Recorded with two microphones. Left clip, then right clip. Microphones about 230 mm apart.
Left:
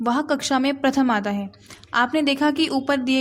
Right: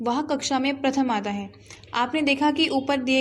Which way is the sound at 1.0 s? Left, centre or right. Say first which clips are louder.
Left 4 dB; left.